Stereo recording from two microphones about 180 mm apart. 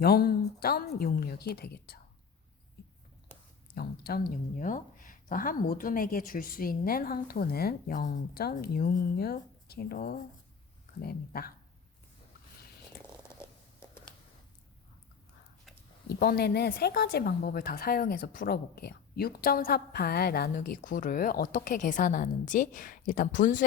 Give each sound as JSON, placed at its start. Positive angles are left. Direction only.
{"t": 0.0, "sound": "a woman's voice", "side_deg": 60}
{"t": 3.8, "sound": "a woman's voice", "side_deg": 55}
{"t": 13.4, "sound": "a sound", "side_deg": 15}
{"t": 16.0, "sound": "a woman's voice", "side_deg": 60}